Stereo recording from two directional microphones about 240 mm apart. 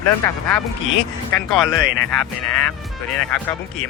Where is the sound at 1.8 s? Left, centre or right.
Right.